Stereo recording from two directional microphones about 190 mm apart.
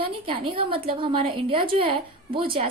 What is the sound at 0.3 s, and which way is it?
A woman's voice, 30° right (ahead or behind).